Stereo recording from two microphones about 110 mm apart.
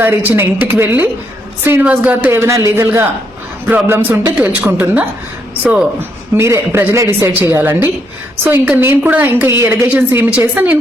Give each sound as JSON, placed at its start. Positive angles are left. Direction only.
{"t": 0.0, "sound": "speech", "side_deg": -15}
{"t": 2.3, "sound": "a woman's voice", "side_deg": -25}